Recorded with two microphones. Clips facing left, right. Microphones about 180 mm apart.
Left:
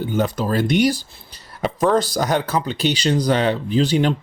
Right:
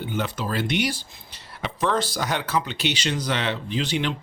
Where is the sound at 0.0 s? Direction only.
40° left (ahead or behind).